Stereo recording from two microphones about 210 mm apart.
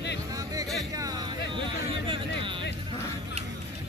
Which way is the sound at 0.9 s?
20° right (ahead or behind).